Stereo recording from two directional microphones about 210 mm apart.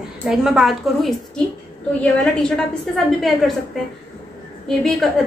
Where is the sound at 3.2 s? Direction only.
Centre (ahead or behind).